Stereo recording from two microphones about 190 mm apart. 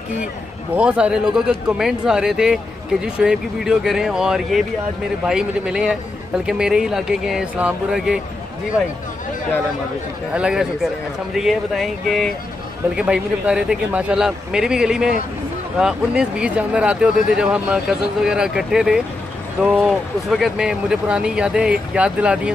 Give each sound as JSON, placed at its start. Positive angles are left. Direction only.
{"t": 0.7, "sound": "speech", "side_deg": -5}
{"t": 10.3, "sound": "speech", "side_deg": -5}